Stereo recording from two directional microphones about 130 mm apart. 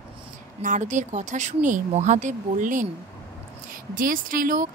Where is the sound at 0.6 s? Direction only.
70° right (ahead or behind); by 2.8 s 85° right.